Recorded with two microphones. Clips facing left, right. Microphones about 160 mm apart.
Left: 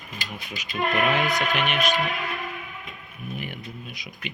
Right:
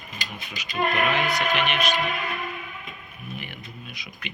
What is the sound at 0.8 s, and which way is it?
Speech, centre (ahead or behind).